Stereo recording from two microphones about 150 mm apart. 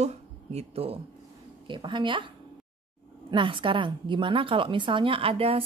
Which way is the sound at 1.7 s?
30° right (ahead or behind).